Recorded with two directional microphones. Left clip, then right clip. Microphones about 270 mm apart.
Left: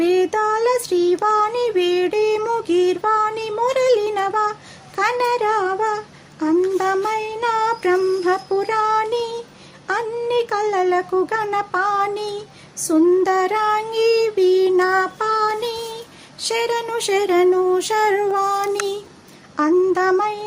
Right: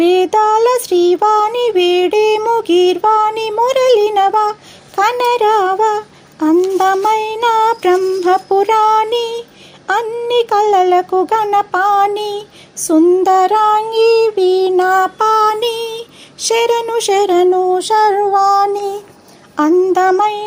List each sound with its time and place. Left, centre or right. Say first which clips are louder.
0.0 s child singing: right 7 dB; centre
4.9 s a sound: right 6 dB; centre
6.4 s child singing: right 6 dB; centre
9.8 s speech: right 6 dB; centre
15.2 s a sound: right 8 dB; right; by 17.9 s centre
18.0 s child singing: right 8 dB; centre